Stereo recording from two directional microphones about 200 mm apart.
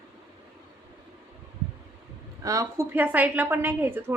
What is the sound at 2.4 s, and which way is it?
A woman's voice, 15° right (ahead or behind).